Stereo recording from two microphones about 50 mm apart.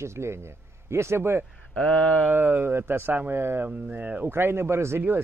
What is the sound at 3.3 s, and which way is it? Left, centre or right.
Speech, right.